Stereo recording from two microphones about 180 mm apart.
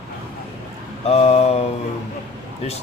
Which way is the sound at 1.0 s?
35° left (ahead or behind).